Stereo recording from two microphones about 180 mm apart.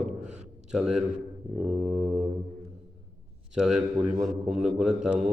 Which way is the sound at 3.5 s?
5° right (ahead or behind).